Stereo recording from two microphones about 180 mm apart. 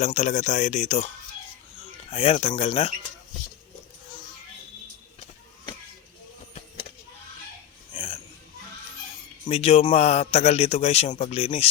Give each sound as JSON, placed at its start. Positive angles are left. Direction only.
{"t": 0.0, "sound": "a man's voice", "side_deg": 40}
{"t": 2.0, "sound": "a man's voice", "side_deg": 30}
{"t": 7.9, "sound": "a sound", "side_deg": 25}
{"t": 9.5, "sound": "a man's voice", "side_deg": 35}